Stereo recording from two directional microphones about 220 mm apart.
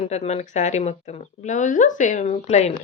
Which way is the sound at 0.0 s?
30° left (ahead or behind).